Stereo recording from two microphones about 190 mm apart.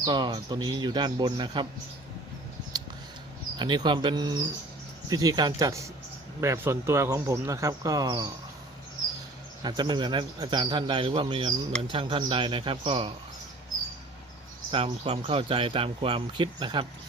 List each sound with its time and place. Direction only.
0.0 s speech: 25° right (ahead or behind)
3.6 s speech: 25° right (ahead or behind)
9.6 s speech: 20° right (ahead or behind)
14.7 s speech: 30° right (ahead or behind)